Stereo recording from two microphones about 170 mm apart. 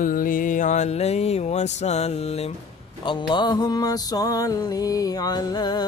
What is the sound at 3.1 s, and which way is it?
Music, 25° left (ahead or behind).